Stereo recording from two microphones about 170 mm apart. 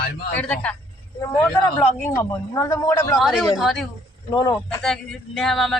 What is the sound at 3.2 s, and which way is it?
Speech, centre (ahead or behind).